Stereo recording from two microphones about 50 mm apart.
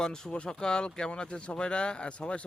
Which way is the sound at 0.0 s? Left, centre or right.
Centre.